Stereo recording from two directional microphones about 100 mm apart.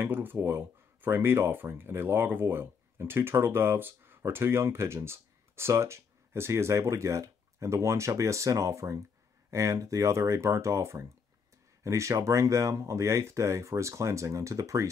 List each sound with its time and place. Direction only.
0.0 s speech: 20° right (ahead or behind)